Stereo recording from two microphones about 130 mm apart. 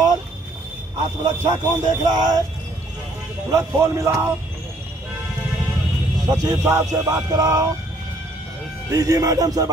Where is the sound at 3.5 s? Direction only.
20° right (ahead or behind).